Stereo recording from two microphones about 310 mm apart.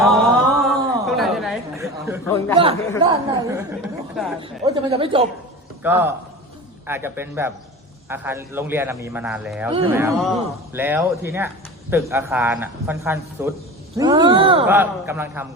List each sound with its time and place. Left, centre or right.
0.0 s a sound: centre
3.0 s speech: centre
4.1 s speech: centre
4.4 s speech: centre
5.8 s speech: centre